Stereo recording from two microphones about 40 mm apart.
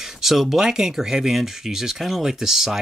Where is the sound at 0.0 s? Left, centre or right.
Centre.